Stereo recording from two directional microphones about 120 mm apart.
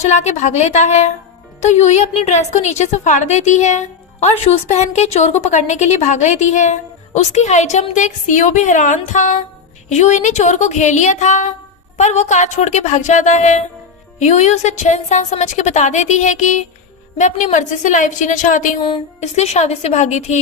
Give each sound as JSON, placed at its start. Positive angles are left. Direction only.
{"t": 0.0, "sound": "a woman's voice", "side_deg": 75}
{"t": 9.9, "sound": "a woman's voice", "side_deg": 75}
{"t": 18.8, "sound": "a woman's voice", "side_deg": 45}
{"t": 19.2, "sound": "a woman's voice", "side_deg": 70}